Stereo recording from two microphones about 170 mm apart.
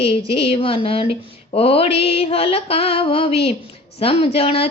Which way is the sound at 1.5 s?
35° left (ahead or behind).